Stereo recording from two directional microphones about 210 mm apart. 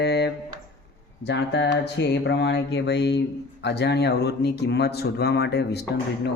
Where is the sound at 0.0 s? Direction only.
50° left (ahead or behind).